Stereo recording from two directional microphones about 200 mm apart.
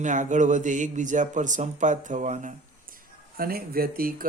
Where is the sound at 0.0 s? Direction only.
40° right (ahead or behind).